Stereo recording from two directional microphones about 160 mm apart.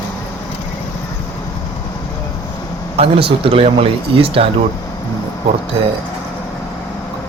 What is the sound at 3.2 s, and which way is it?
Speech, 35° right (ahead or behind).